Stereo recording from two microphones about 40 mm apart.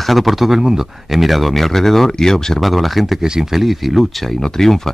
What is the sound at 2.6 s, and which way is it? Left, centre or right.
Speech, centre.